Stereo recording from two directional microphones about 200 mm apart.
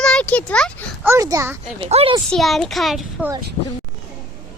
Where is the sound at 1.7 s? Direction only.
25° right (ahead or behind).